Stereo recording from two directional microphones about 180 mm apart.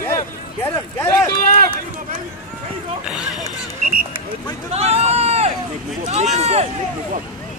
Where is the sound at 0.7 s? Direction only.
15° left (ahead or behind).